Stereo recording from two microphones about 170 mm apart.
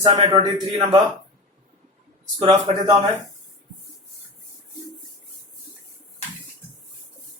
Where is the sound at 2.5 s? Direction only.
25° right (ahead or behind).